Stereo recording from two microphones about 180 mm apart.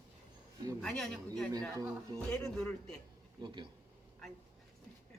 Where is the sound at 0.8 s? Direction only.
Centre (ahead or behind).